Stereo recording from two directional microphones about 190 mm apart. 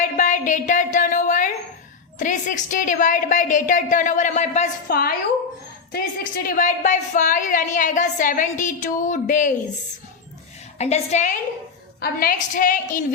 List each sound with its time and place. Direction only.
0.0 s a sound: 40° left (ahead or behind)
2.1 s a woman's voice: 40° left (ahead or behind)
5.9 s a woman's voice: 50° left (ahead or behind)
10.8 s a woman's voice: 35° left (ahead or behind)
11.9 s a woman's voice: 50° left (ahead or behind)